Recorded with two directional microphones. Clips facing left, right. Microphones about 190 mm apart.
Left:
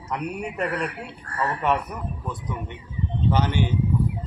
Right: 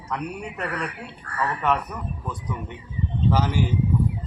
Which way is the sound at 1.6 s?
10° left (ahead or behind).